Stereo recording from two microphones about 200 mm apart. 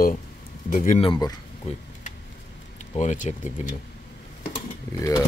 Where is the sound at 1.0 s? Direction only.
20° left (ahead or behind).